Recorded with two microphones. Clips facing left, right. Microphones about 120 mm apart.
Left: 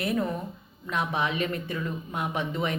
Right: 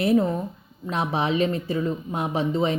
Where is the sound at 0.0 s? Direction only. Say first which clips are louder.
Right 7 dB; 30° right (ahead or behind).